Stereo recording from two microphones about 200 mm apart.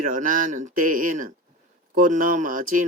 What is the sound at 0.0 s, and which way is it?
Speech, 40° right (ahead or behind).